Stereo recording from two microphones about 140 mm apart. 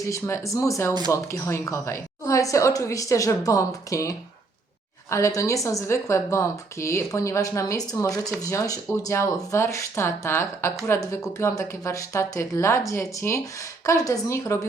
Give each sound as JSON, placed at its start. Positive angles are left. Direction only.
{"t": 0.0, "sound": "speech", "side_deg": 20}
{"t": 5.1, "sound": "speech", "side_deg": 20}